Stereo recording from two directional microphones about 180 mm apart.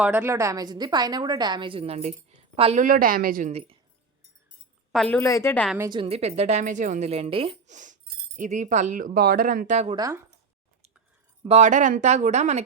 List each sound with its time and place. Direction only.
0.0 s a woman's voice: 10° right (ahead or behind); by 2.8 s 35° right (ahead or behind)
2.8 s speech: 50° right (ahead or behind)
5.1 s a woman's voice: 15° left (ahead or behind)
5.9 s speech: 30° right (ahead or behind)
9.9 s speech: 20° right (ahead or behind)
11.4 s speech: 40° right (ahead or behind)